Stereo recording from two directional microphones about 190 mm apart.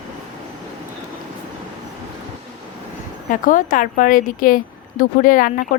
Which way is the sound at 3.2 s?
45° left (ahead or behind).